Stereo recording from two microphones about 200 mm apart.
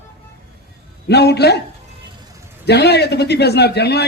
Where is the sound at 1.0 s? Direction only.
55° left (ahead or behind).